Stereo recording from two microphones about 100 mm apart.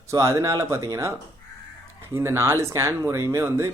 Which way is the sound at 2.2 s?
25° right (ahead or behind).